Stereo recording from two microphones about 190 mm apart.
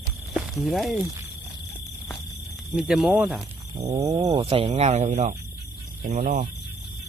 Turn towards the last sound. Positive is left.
turn(degrees=-45)  # may be behind; listen again after turning